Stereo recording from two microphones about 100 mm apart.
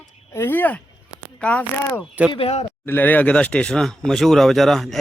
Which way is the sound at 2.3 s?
75° left (ahead or behind).